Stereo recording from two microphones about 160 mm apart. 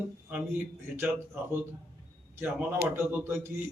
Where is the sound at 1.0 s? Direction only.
15° right (ahead or behind).